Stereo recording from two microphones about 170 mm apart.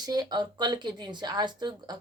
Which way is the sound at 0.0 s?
25° right (ahead or behind).